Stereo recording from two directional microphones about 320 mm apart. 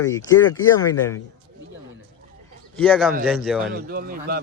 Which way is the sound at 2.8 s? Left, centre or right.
Centre.